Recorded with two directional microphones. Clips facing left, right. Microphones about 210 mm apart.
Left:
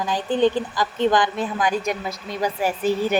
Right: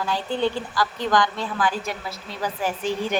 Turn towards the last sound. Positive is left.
turn(degrees=5)  # may be behind; listen again after turning